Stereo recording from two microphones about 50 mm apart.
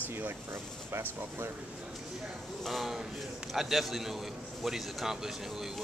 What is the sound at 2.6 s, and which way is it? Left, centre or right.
Speech, centre.